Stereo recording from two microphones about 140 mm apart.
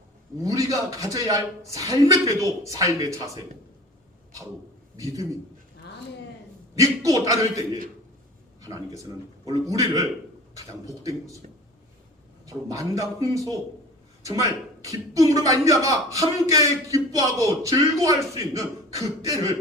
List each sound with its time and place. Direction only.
0.3 s a man's voice: 25° right (ahead or behind)
4.9 s a man's voice: 25° right (ahead or behind)
6.7 s a man's voice: 25° right (ahead or behind)
8.6 s a man's voice: 25° right (ahead or behind)
12.5 s a man's voice: 25° right (ahead or behind)